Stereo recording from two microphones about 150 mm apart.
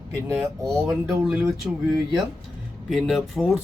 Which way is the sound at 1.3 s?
10° right (ahead or behind).